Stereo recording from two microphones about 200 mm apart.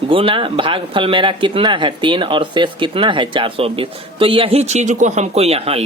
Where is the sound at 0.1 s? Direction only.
25° right (ahead or behind).